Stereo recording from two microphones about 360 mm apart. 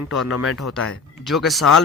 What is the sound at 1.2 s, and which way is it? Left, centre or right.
Speech, centre.